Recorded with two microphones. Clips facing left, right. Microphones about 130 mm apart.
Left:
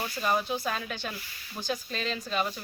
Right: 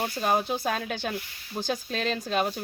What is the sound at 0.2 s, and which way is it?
Speech, 50° right (ahead or behind).